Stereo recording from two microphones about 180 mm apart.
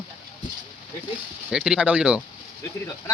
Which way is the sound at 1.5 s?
5° right (ahead or behind).